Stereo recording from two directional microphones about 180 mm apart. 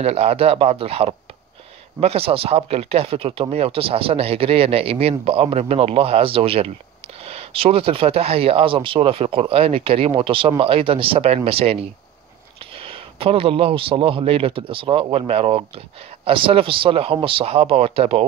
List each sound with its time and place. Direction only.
0.0 s speech: 35° right (ahead or behind)